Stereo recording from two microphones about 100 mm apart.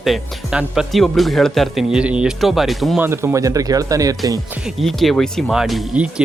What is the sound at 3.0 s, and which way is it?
Speech, 25° right (ahead or behind).